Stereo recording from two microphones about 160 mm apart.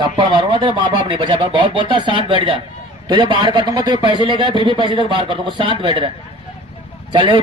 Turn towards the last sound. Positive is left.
turn(degrees=-30)  # may be behind; listen again after turning